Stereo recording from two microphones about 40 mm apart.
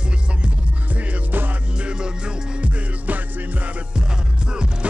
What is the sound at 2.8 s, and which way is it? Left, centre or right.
Music, right.